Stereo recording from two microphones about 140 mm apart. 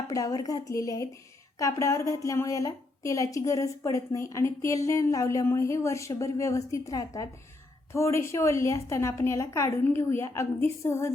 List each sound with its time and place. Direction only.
0.1 s a woman's voice: 25° left (ahead or behind)